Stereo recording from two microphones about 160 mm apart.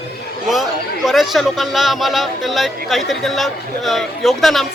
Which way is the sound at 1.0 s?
Centre (ahead or behind).